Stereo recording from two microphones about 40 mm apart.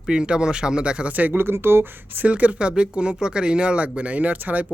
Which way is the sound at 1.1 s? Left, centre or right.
Right.